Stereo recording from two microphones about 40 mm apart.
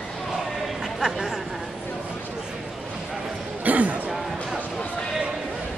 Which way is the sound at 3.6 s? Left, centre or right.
Right.